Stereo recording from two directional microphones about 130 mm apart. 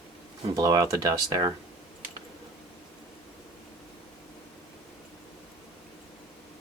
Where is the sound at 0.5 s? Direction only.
30° right (ahead or behind).